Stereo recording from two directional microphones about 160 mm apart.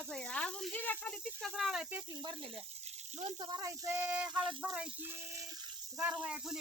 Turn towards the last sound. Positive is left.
turn(degrees=-5)  # may be behind; listen again after turning